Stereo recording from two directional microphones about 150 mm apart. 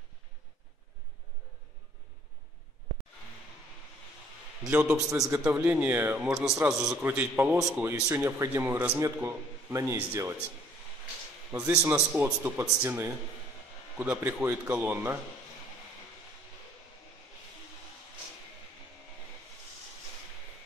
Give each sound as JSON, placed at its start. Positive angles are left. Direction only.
{"t": 4.6, "sound": "a man's voice", "side_deg": -5}
{"t": 11.8, "sound": "a man's voice", "side_deg": -15}